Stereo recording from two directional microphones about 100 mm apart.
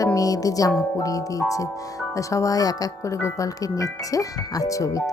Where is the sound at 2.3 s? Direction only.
35° left (ahead or behind).